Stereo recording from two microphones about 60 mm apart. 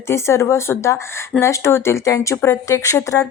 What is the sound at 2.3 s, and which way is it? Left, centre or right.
Speech, left.